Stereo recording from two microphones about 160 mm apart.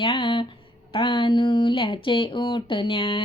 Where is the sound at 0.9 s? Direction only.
30° left (ahead or behind).